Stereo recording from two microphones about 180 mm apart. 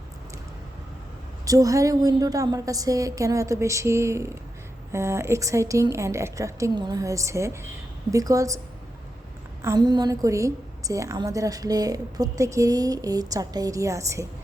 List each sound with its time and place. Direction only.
1.5 s a woman's voice: 20° right (ahead or behind)